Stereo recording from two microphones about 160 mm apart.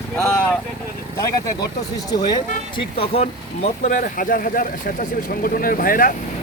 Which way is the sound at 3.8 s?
55° left (ahead or behind).